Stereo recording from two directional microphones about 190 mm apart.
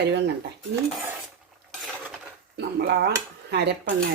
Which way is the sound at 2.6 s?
60° right (ahead or behind).